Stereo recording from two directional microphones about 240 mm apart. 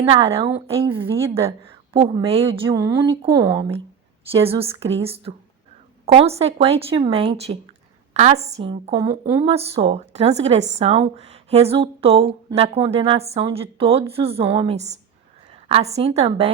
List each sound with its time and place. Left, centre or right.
0.0 s a woman's voice: right